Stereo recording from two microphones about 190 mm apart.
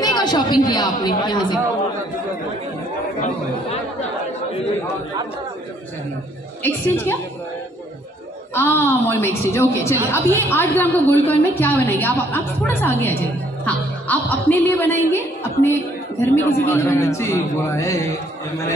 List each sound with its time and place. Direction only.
0.0 s speech: 20° left (ahead or behind)
8.5 s a woman's voice: 10° left (ahead or behind)